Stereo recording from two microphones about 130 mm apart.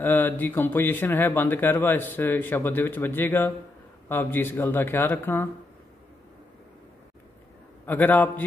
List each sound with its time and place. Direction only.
0.0 s speech: 15° left (ahead or behind)
7.8 s speech: 15° left (ahead or behind)